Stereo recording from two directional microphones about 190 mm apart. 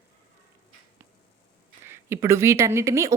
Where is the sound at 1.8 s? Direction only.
15° right (ahead or behind).